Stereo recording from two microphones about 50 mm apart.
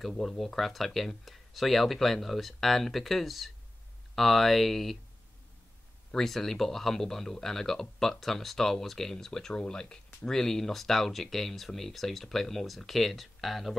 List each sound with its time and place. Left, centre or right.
0.0 s speech: centre
6.1 s speech: centre